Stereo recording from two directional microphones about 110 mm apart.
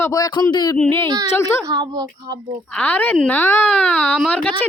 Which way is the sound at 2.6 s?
15° left (ahead or behind).